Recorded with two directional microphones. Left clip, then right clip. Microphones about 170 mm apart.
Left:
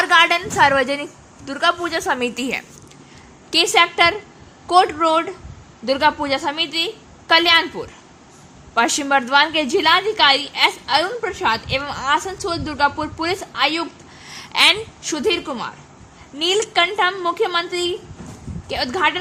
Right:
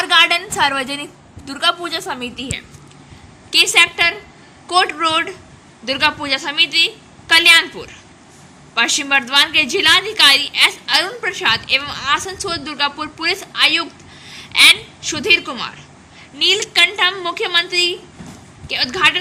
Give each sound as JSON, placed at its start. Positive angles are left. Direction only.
{"t": 0.0, "sound": "a sound", "side_deg": 25}
{"t": 1.5, "sound": "a woman's voice", "side_deg": 25}
{"t": 3.5, "sound": "a woman's voice", "side_deg": 35}
{"t": 14.3, "sound": "a woman's voice", "side_deg": 45}